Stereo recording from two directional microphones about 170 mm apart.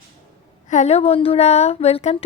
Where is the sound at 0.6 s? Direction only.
45° left (ahead or behind).